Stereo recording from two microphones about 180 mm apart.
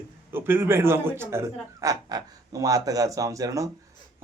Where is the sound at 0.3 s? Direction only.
10° right (ahead or behind).